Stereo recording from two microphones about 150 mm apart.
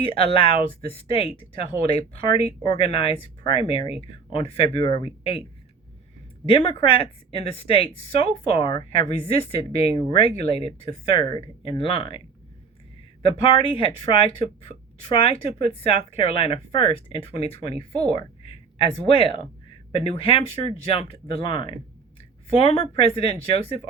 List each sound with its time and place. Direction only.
0.0 s speech: 40° left (ahead or behind)
2.6 s speech: 35° left (ahead or behind)
6.5 s speech: 35° left (ahead or behind)
13.2 s speech: 35° left (ahead or behind)